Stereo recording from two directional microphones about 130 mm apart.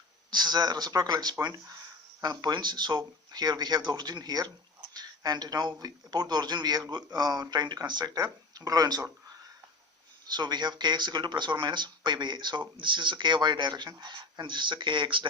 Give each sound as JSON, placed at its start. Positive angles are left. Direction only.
{"t": 0.3, "sound": "speech", "side_deg": -35}
{"t": 10.2, "sound": "speech", "side_deg": -35}